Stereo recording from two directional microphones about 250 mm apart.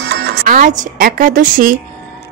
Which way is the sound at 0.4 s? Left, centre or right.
Right.